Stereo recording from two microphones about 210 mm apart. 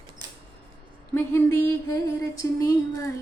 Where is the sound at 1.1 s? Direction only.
10° left (ahead or behind).